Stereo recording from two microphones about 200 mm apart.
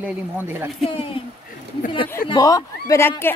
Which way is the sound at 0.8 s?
25° left (ahead or behind).